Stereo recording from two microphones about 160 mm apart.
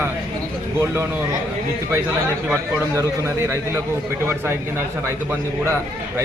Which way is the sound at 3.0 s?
15° right (ahead or behind).